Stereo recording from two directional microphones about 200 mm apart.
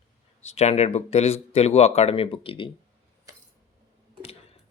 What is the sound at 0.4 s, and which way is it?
Speech, 30° left (ahead or behind).